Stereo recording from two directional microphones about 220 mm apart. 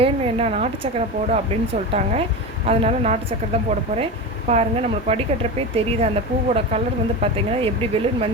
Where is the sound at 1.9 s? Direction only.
25° right (ahead or behind).